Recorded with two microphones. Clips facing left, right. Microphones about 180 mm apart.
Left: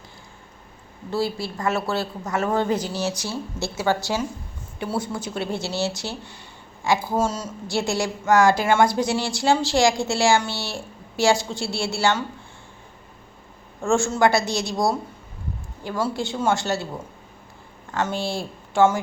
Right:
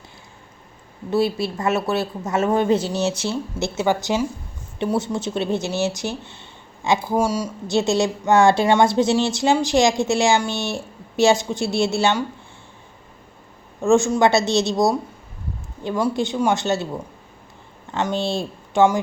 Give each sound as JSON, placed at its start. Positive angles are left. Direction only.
{"t": 1.1, "sound": "a woman's voice", "side_deg": -20}
{"t": 13.8, "sound": "a woman's voice", "side_deg": -20}
{"t": 17.9, "sound": "speech", "side_deg": -20}